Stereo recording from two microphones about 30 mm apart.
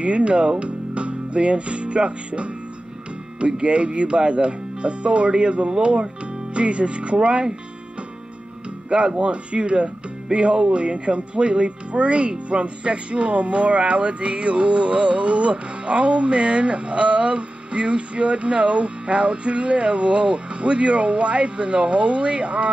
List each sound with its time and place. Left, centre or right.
0.0 s speech: right
9.2 s speech: right